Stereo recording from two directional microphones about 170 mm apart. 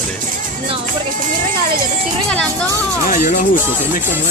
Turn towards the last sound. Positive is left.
turn(degrees=45)  # may be behind; listen again after turning